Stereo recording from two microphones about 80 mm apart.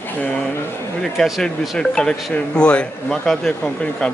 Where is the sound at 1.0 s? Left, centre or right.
Centre.